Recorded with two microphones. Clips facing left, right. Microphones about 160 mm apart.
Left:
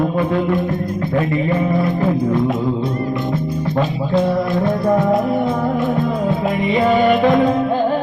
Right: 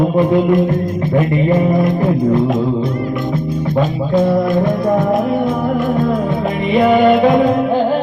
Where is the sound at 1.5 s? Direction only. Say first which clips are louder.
Right 4 dB; 40° right (ahead or behind).